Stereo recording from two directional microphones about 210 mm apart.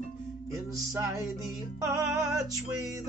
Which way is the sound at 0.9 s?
15° right (ahead or behind).